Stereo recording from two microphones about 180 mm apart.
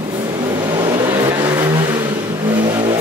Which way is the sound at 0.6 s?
25° right (ahead or behind).